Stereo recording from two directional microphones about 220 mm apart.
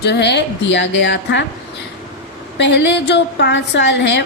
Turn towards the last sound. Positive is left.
turn(degrees=50)  # may be behind; listen again after turning